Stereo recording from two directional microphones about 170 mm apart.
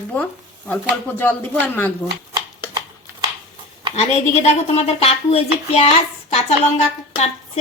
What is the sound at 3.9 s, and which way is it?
Speech, 40° left (ahead or behind).